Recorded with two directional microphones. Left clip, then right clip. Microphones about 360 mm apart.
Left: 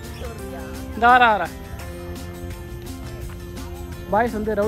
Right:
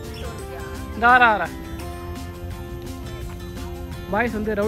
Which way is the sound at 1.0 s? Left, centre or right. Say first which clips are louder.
Left 1 dB; centre.